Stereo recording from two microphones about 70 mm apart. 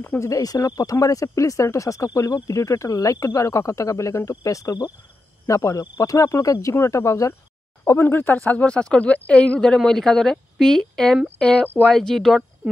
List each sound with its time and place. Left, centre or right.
0.2 s speech: left
7.8 s speech: left; by 12.4 s centre